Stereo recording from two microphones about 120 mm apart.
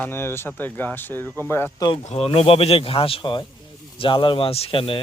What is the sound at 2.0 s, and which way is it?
Speech, 55° left (ahead or behind).